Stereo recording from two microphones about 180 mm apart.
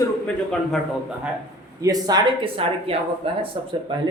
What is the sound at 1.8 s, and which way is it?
Speech, 20° right (ahead or behind).